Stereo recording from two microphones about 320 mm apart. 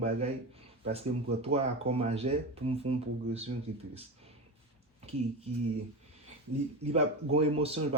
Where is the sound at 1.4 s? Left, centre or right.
Centre.